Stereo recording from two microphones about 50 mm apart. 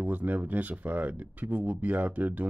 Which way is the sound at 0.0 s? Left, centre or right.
Right.